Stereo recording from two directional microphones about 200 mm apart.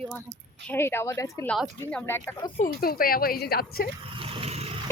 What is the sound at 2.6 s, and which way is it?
A woman's voice, 45° left (ahead or behind).